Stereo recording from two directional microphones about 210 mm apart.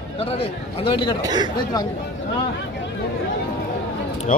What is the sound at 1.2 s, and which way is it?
Speech, 20° right (ahead or behind).